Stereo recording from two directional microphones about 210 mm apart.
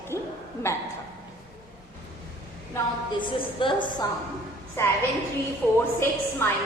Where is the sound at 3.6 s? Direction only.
25° left (ahead or behind).